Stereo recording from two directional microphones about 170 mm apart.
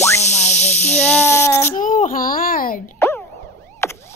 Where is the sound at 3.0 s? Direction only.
15° left (ahead or behind).